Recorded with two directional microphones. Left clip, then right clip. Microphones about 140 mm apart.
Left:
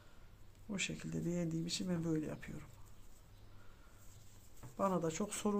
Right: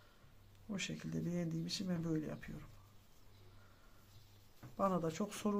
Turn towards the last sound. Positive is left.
turn(degrees=20)  # may be behind; listen again after turning